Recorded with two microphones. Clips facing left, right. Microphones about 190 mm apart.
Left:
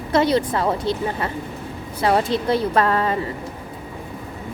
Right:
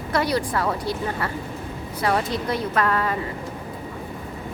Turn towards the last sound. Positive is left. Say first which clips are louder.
# left 4 dB
turn(degrees=30)  # may be behind; listen again after turning